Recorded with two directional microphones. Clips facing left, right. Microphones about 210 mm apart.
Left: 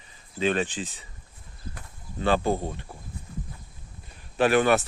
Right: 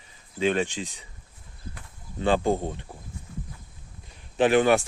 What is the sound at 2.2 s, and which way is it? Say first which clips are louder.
Speech: right 1 dB; 15° right (ahead or behind).